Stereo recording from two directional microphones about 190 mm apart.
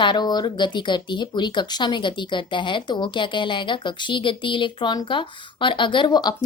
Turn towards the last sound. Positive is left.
turn(degrees=20)  # may be behind; listen again after turning